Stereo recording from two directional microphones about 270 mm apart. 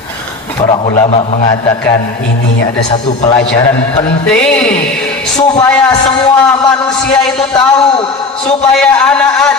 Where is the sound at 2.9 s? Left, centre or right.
Left.